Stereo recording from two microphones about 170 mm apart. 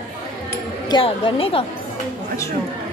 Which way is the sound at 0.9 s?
30° left (ahead or behind).